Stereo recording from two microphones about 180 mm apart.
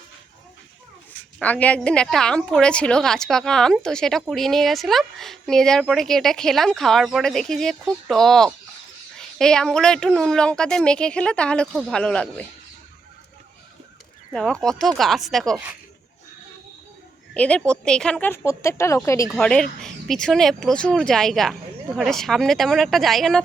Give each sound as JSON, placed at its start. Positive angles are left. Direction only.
{"t": 1.4, "sound": "a woman's voice", "side_deg": 10}
{"t": 14.3, "sound": "a woman's voice", "side_deg": 5}
{"t": 17.3, "sound": "a woman's voice", "side_deg": 5}
{"t": 19.3, "sound": "a woman's voice", "side_deg": 5}